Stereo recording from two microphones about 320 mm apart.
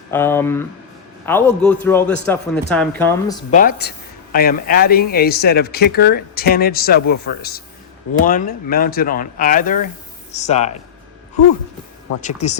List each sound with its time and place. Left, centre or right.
0.1 s a man's voice: centre
3.5 s a man's voice: left
12.4 s speech: left